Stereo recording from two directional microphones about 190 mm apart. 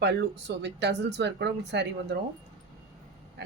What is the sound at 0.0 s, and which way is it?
Speech, 65° right (ahead or behind).